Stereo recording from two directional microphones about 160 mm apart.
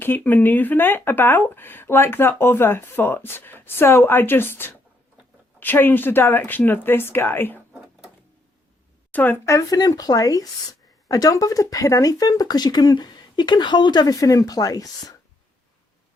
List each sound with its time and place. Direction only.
0.0 s speech: 10° left (ahead or behind)
9.1 s speech: 15° left (ahead or behind)